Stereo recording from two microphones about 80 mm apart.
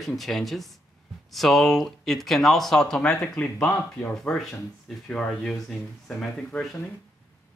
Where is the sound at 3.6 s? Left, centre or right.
Left.